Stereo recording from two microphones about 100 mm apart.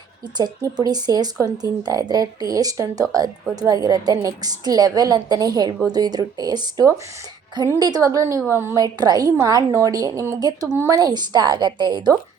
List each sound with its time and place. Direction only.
0.3 s a woman's voice: 45° right (ahead or behind); by 8.7 s 25° right (ahead or behind)
8.7 s a woman's voice: 40° right (ahead or behind)